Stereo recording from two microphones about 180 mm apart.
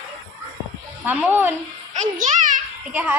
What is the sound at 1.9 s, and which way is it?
Music, 45° right (ahead or behind).